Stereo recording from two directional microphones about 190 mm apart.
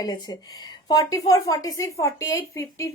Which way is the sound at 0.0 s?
20° left (ahead or behind).